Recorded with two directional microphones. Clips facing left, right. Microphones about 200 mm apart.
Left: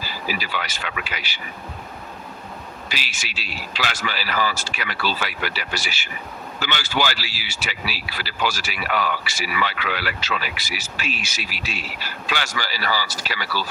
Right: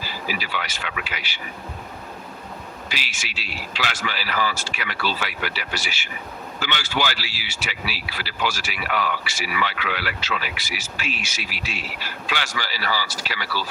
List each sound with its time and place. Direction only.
0.3 s speech: 40° left (ahead or behind)
2.9 s speech: 40° left (ahead or behind)